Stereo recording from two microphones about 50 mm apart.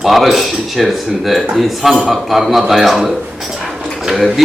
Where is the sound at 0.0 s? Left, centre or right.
Centre.